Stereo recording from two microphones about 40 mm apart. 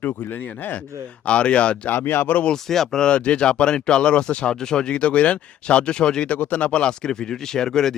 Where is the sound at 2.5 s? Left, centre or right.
Centre.